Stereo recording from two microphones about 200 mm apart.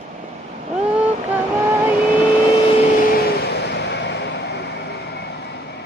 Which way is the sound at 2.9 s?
50° left (ahead or behind).